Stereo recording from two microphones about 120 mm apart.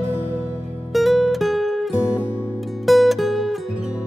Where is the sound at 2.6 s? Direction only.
Centre (ahead or behind).